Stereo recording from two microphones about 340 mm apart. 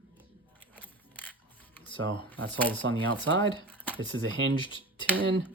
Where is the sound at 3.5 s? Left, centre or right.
Centre.